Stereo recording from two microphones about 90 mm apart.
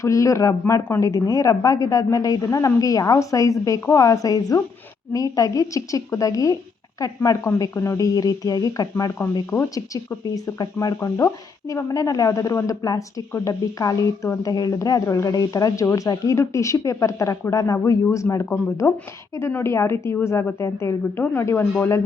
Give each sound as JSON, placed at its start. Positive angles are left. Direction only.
{"t": 0.0, "sound": "speech", "side_deg": 35}
{"t": 10.3, "sound": "a woman's voice", "side_deg": 40}